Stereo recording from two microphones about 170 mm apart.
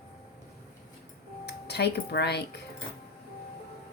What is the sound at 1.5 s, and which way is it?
Speech, 80° left.